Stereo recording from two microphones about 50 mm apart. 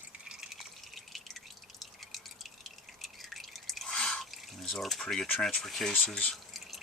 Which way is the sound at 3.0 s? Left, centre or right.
Centre.